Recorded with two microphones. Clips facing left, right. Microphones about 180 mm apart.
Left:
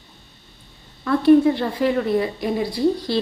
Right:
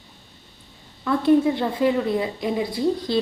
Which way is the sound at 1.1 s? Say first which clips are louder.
Left 4 dB; 15° right (ahead or behind).